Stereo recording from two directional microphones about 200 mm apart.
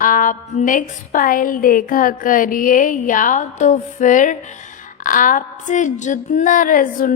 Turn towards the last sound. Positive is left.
turn(degrees=45)  # may be behind; listen again after turning